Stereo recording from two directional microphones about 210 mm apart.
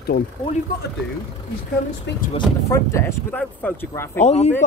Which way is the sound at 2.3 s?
15° left (ahead or behind).